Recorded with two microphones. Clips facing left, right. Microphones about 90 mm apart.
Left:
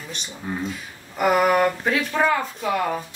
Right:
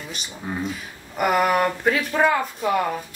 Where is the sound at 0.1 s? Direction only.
5° right (ahead or behind).